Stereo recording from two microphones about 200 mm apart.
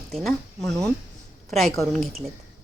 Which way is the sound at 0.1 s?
Centre (ahead or behind).